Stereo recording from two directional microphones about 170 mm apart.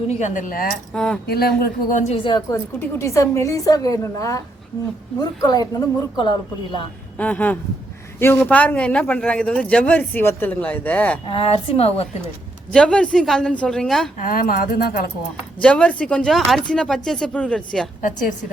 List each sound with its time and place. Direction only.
0.1 s speech: 45° left (ahead or behind)
0.9 s speech: 5° left (ahead or behind)
1.3 s speech: 65° left (ahead or behind); by 2.1 s 50° left (ahead or behind)
2.1 s speech: 25° left (ahead or behind)
3.0 s speech: 15° left (ahead or behind)
7.2 s a man's voice: 10° left (ahead or behind)
11.3 s a woman's voice: 35° left (ahead or behind)
12.7 s speech: 5° left (ahead or behind)
14.2 s speech: 55° left (ahead or behind)
15.6 s speech: 5° left (ahead or behind)
18.0 s speech: 50° left (ahead or behind)